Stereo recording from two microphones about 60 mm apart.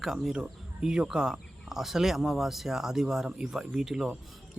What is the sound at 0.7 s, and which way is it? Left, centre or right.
Speech, centre.